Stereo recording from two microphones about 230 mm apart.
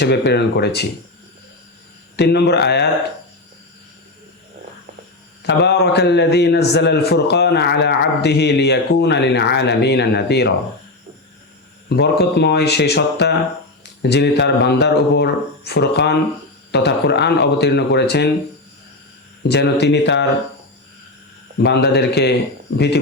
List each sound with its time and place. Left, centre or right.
0.0 s a man's voice: left
2.1 s a man's voice: left
5.4 s a man's voice: left
11.9 s a man's voice: left
19.4 s a man's voice: left
21.6 s a man's voice: left